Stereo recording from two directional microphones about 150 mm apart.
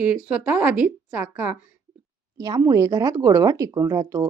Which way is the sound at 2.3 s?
25° right (ahead or behind).